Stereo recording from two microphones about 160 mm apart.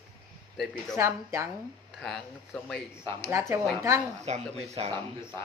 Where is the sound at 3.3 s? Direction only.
15° right (ahead or behind).